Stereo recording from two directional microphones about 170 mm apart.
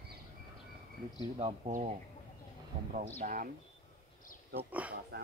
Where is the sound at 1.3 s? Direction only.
40° right (ahead or behind).